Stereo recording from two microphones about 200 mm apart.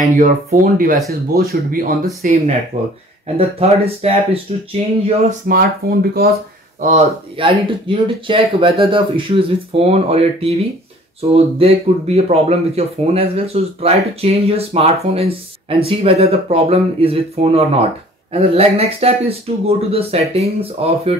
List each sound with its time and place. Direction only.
0.0 s speech: 40° right (ahead or behind)
2.7 s speech: 30° right (ahead or behind)
5.5 s speech: 50° right (ahead or behind)
6.8 s speech: 35° right (ahead or behind)